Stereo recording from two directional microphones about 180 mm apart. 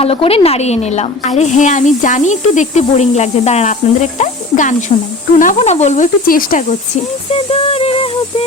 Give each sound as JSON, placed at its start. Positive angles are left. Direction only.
{"t": 0.0, "sound": "speech", "side_deg": 35}
{"t": 7.3, "sound": "music", "side_deg": 30}